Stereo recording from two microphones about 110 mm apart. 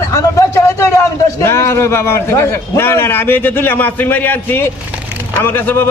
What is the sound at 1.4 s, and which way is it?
Speech, 25° left (ahead or behind).